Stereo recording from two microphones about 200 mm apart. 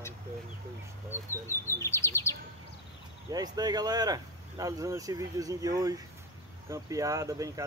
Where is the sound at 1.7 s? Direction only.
15° left (ahead or behind).